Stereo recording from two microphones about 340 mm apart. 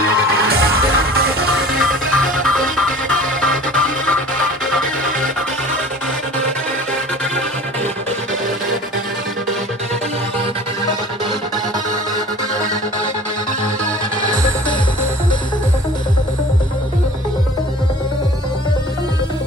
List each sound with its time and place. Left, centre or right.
0.5 s music: right
1.8 s music: centre
4.6 s music: centre